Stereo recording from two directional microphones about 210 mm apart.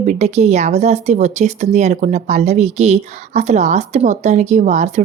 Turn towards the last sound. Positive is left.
turn(degrees=-35)  # may be behind; listen again after turning